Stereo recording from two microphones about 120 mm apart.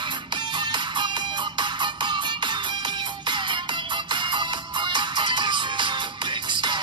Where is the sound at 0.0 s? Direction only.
40° right (ahead or behind).